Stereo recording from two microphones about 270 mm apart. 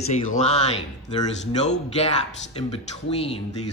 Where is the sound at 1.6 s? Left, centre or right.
Left.